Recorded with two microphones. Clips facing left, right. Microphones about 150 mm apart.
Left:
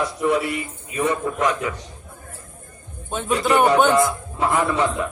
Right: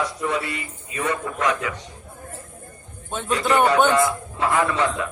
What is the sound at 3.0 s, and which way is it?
Speech, 5° left (ahead or behind).